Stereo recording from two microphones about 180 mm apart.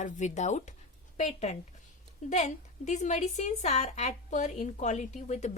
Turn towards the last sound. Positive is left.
turn(degrees=40)  # may be behind; listen again after turning